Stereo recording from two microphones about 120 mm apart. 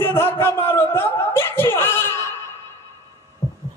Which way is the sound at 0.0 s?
20° left (ahead or behind).